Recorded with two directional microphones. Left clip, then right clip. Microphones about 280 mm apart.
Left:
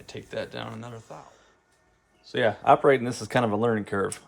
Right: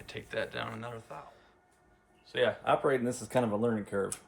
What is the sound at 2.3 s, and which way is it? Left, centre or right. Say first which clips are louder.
Speech: left 8 dB; centre.